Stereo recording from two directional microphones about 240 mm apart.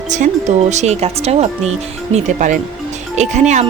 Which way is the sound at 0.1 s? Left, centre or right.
Right.